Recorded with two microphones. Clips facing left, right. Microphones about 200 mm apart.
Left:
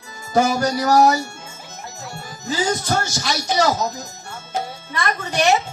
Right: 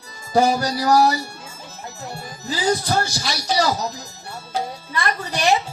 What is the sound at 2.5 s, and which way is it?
Speech, 35° right (ahead or behind).